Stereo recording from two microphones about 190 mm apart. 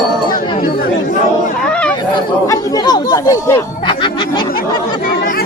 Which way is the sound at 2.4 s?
20° left (ahead or behind).